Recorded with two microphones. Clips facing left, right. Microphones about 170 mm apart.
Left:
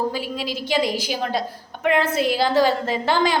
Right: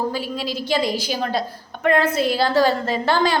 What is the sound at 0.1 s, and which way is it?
A woman's voice, 15° left (ahead or behind).